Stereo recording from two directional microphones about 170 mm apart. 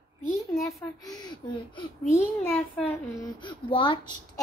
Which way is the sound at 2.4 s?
10° left (ahead or behind).